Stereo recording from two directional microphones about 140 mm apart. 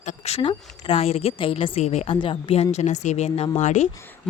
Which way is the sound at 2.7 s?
55° left (ahead or behind).